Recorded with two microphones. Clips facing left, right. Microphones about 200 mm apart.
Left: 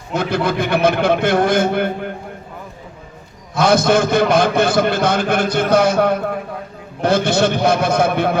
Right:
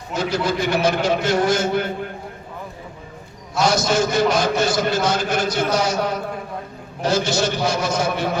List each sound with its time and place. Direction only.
0.1 s a man's voice: 55° left (ahead or behind)
3.6 s a man's voice: 55° left (ahead or behind)